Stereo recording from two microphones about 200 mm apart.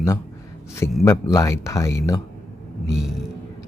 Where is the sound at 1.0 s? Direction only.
15° left (ahead or behind).